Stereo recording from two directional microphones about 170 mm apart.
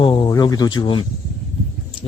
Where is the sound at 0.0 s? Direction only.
30° left (ahead or behind).